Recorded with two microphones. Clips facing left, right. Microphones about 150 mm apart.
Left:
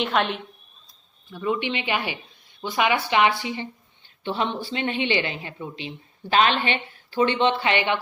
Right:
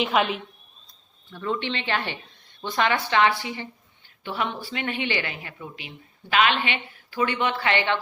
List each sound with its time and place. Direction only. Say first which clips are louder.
0.0 s a woman's voice: right 1 dB; 5° right (ahead or behind)
1.3 s speech: left 2 dB; 10° left (ahead or behind)